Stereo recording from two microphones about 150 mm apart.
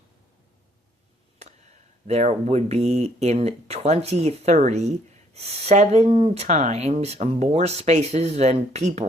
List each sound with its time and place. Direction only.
2.0 s speech: 45° right (ahead or behind)